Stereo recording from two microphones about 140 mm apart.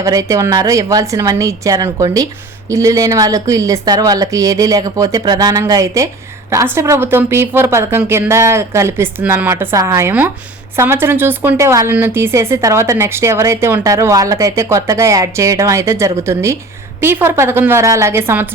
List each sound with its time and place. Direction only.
0.0 s a woman's voice: 25° right (ahead or behind)